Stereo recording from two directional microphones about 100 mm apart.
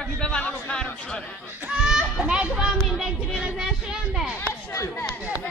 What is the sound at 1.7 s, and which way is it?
A child's voice, 5° right (ahead or behind).